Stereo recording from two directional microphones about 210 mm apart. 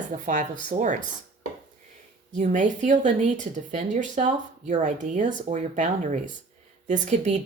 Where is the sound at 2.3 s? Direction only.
35° right (ahead or behind).